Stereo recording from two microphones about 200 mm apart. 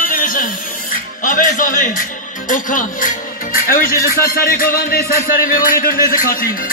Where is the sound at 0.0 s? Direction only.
45° left (ahead or behind).